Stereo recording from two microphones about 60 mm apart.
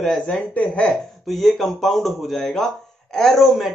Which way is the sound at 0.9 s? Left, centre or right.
Centre.